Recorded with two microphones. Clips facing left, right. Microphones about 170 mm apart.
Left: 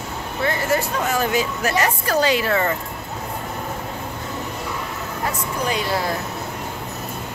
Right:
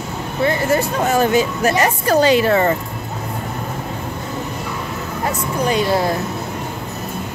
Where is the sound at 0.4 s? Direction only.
20° right (ahead or behind).